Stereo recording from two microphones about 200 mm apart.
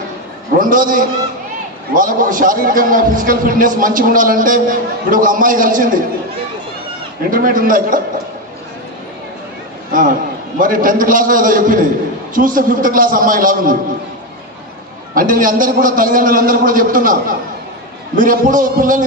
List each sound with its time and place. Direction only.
0.6 s a man's voice: 45° right (ahead or behind)
7.3 s a man's voice: 45° right (ahead or behind)
9.9 s a man's voice: 45° right (ahead or behind)
15.1 s a man's voice: 45° right (ahead or behind)